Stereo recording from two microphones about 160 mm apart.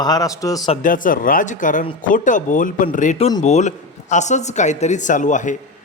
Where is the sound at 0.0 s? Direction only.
25° left (ahead or behind).